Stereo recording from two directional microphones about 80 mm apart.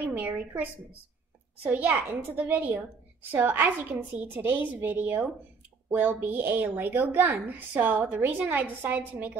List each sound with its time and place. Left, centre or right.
0.1 s a woman's voice: right
1.7 s a woman's voice: right